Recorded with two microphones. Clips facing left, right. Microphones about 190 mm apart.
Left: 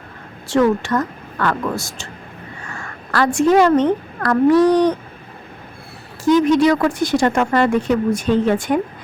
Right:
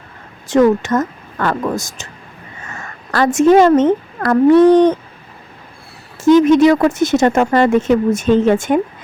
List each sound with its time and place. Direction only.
0.4 s a woman's voice: 20° right (ahead or behind)
6.2 s speech: 20° right (ahead or behind)